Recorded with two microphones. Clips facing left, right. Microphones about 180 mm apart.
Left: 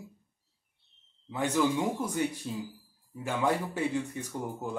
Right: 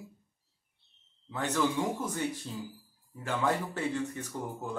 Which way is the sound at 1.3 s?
10° left (ahead or behind).